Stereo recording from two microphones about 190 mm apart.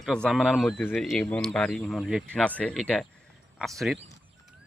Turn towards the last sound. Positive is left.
turn(degrees=0)  # may be behind; listen again after turning